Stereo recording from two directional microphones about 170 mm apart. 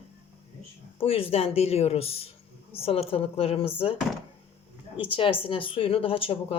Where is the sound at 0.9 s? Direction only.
35° left (ahead or behind).